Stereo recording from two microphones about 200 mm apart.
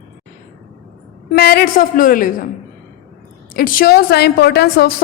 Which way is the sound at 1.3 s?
50° left (ahead or behind).